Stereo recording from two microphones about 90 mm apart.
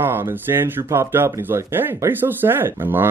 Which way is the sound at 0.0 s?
25° right (ahead or behind).